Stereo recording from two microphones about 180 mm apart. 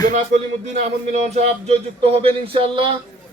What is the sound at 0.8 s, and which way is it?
A man's voice, 40° right (ahead or behind).